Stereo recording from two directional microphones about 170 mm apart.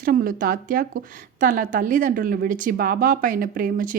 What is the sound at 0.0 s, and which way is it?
A woman's voice, 60° right (ahead or behind).